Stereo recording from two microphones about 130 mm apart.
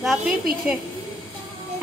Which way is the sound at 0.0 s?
5° right (ahead or behind).